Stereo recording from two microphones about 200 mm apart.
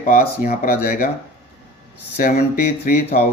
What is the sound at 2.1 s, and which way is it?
Speech, 50° left (ahead or behind).